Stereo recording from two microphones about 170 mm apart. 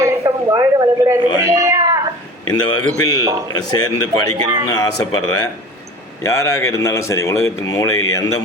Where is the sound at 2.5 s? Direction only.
25° left (ahead or behind).